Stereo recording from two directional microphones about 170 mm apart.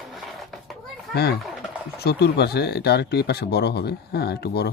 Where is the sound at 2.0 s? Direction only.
70° left (ahead or behind).